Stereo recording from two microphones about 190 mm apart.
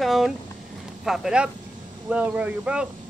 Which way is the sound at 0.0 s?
Centre (ahead or behind).